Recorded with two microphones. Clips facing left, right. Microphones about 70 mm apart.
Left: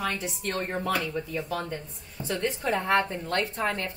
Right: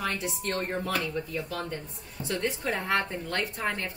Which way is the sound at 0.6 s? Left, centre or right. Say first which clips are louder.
Left 2 dB; left.